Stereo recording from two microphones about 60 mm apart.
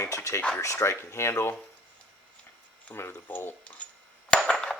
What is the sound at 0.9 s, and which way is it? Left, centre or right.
Speech, left.